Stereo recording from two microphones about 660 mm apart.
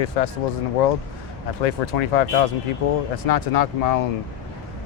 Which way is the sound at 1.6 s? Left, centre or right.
Left.